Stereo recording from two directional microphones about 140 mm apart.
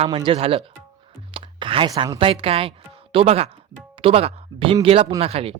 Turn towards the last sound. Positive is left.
turn(degrees=-45)  # may be behind; listen again after turning